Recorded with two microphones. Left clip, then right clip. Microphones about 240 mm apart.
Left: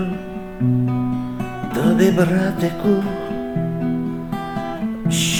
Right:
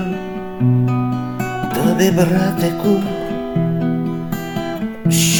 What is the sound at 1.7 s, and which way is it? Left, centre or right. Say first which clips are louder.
Music: even; centre.